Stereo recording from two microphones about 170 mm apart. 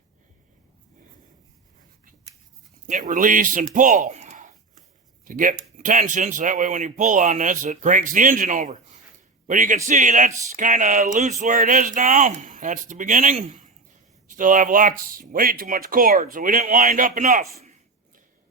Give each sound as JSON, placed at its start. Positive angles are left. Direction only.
{"t": 2.8, "sound": "speech", "side_deg": -50}